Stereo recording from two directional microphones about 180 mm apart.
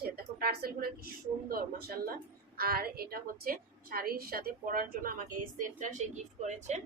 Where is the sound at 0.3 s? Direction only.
55° right (ahead or behind).